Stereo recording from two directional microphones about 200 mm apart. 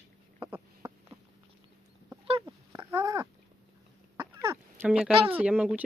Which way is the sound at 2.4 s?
15° right (ahead or behind).